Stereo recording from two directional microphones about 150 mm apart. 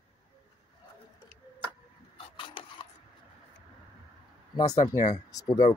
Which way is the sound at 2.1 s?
35° left (ahead or behind).